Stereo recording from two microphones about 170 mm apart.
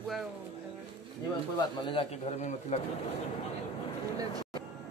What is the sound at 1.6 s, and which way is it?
Speech, 30° left (ahead or behind).